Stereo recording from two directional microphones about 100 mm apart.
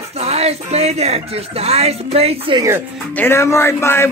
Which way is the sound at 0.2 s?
90° right.